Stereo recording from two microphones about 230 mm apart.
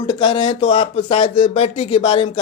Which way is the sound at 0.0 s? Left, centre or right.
Centre.